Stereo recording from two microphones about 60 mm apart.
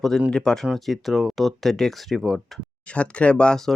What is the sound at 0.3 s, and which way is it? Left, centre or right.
Speech, centre.